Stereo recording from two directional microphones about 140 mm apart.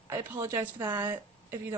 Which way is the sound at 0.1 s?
15° right (ahead or behind).